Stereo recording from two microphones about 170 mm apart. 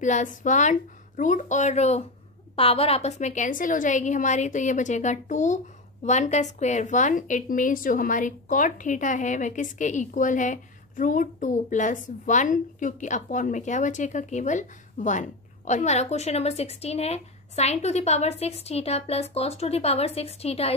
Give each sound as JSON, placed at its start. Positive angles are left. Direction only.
{"t": 0.0, "sound": "a woman's voice", "side_deg": 45}